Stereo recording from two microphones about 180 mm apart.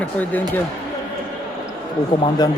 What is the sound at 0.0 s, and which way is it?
Speech, 10° left (ahead or behind).